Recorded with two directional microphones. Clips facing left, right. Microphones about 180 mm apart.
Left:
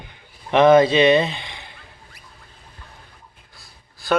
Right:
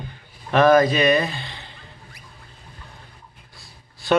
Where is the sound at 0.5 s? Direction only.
25° left (ahead or behind).